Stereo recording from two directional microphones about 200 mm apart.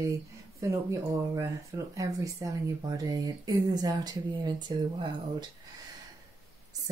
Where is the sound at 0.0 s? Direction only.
15° right (ahead or behind).